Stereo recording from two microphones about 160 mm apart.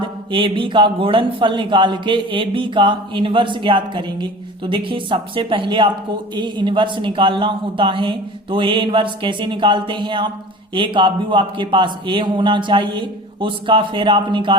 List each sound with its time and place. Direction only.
0.3 s speech: 35° right (ahead or behind)